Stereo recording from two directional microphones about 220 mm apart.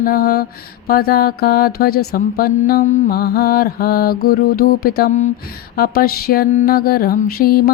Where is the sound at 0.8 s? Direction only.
45° left (ahead or behind).